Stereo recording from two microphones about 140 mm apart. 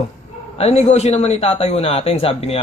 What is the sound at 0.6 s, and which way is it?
A man's voice, 50° left (ahead or behind).